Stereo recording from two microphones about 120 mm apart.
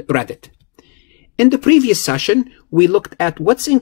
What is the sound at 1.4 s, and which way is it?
Speech, 20° left (ahead or behind).